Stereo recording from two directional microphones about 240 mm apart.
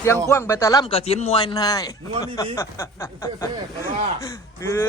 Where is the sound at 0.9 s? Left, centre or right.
Left.